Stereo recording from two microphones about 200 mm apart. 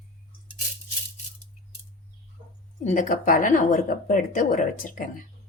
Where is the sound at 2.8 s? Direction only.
40° left (ahead or behind).